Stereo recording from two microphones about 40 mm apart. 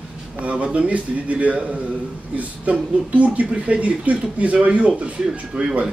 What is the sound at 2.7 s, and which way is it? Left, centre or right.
Speech, right.